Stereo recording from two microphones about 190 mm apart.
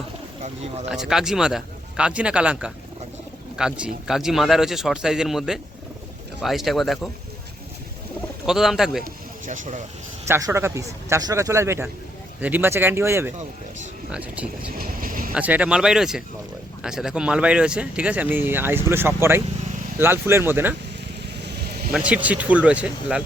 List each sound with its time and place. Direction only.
0.4 s speech: 40° right (ahead or behind)
0.9 s speech: 5° right (ahead or behind)
8.4 s speech: centre (ahead or behind)
9.5 s speech: 40° right (ahead or behind)
10.2 s speech: 15° right (ahead or behind)
14.8 s speech: 50° right (ahead or behind)
15.4 s speech: 5° right (ahead or behind)
21.9 s speech: 5° right (ahead or behind)